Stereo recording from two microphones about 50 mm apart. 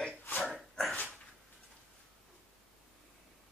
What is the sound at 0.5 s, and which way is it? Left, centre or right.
Dog, centre.